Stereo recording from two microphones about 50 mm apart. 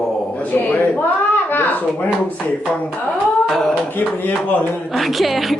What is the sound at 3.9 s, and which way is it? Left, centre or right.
Speech, left.